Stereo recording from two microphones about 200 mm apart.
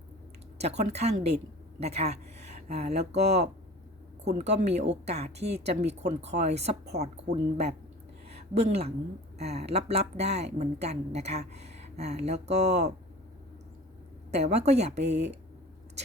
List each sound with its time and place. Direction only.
0.6 s speech: 35° right (ahead or behind)
8.3 s a sound: 30° right (ahead or behind)
9.4 s speech: 30° right (ahead or behind)
14.3 s speech: 35° right (ahead or behind)
15.0 s speech: 60° right (ahead or behind)